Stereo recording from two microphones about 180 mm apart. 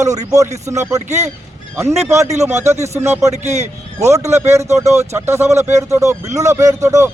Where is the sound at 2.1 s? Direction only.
15° right (ahead or behind).